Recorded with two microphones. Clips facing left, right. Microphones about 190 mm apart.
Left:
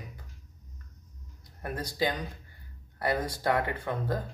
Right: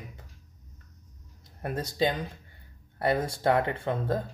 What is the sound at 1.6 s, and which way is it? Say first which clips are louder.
Speech: right 3 dB; 25° right (ahead or behind).